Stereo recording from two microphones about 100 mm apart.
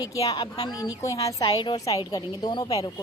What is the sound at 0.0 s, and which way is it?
Speech, 35° left (ahead or behind).